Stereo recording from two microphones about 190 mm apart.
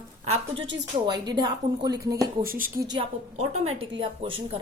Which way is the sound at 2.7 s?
20° right (ahead or behind).